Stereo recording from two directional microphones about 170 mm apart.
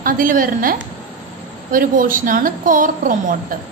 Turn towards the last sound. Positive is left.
turn(degrees=-50)  # may be behind; listen again after turning